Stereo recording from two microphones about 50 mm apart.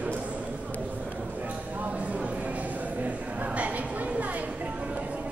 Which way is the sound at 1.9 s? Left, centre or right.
Right.